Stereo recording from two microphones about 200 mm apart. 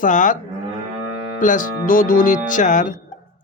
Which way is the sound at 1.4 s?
40° left (ahead or behind).